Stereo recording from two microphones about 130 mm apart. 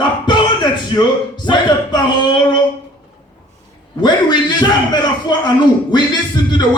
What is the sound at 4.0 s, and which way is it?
A man's voice, 35° left (ahead or behind).